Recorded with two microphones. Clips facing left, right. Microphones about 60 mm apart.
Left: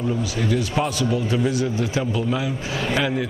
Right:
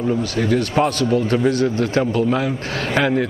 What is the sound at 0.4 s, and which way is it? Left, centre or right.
A man's voice, right.